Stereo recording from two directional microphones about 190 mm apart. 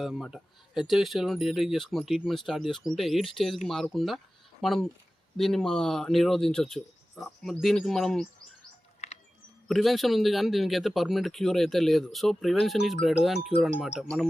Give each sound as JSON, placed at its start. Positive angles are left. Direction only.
{"t": 0.0, "sound": "speech", "side_deg": 0}
{"t": 9.0, "sound": "a sound", "side_deg": 35}
{"t": 9.6, "sound": "speech", "side_deg": 0}